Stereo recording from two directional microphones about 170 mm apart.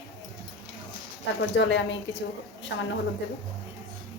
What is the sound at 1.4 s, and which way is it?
A woman's voice, 90° left.